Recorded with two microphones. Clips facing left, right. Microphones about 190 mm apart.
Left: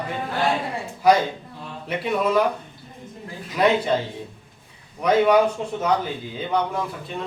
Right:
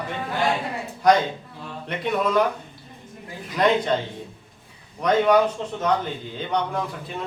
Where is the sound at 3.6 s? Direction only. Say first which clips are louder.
Left 1 dB; 5° left (ahead or behind).